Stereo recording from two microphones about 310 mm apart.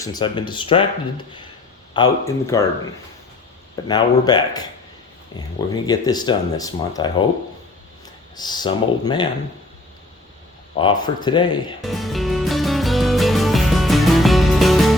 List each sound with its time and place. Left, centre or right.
0.0 s speech: centre
1.9 s speech: centre
3.8 s speech: centre
8.4 s speech: centre
10.8 s speech: centre
11.8 s music: centre